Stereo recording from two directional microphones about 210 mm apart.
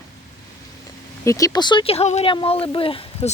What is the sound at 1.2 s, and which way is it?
Speech, 15° left (ahead or behind).